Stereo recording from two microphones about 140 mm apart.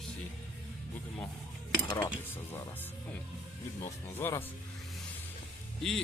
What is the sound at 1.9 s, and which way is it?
Cutlery, 30° left (ahead or behind).